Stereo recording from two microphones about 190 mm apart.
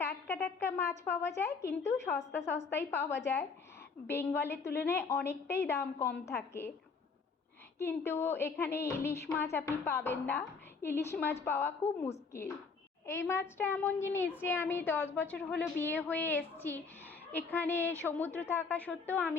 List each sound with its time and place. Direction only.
0.3 s a woman's voice: 10° left (ahead or behind)
3.1 s a woman's voice: 70° left (ahead or behind)
4.0 s a woman's voice: 10° left (ahead or behind)
7.8 s a woman's voice: 10° left (ahead or behind)